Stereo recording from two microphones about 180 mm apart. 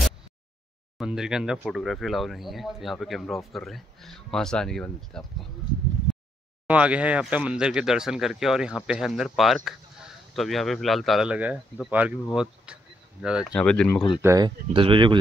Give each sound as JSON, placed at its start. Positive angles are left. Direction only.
{"t": 0.9, "sound": "speech", "side_deg": -5}
{"t": 6.7, "sound": "speech", "side_deg": -5}
{"t": 14.2, "sound": "speech", "side_deg": -20}
{"t": 14.7, "sound": "speech", "side_deg": -30}